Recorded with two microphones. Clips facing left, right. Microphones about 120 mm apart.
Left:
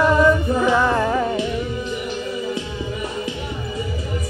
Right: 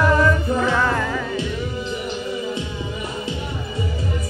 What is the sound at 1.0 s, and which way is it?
Music, 35° left (ahead or behind).